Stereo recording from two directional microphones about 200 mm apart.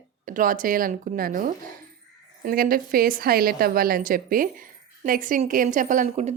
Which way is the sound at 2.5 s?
45° right (ahead or behind).